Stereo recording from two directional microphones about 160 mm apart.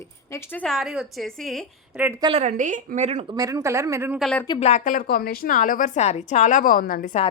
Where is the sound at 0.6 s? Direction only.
Centre (ahead or behind).